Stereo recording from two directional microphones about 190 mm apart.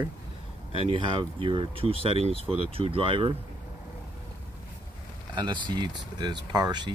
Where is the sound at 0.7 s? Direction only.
25° right (ahead or behind).